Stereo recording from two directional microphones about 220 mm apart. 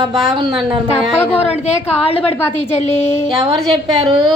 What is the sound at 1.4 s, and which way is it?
Speech, 30° left (ahead or behind).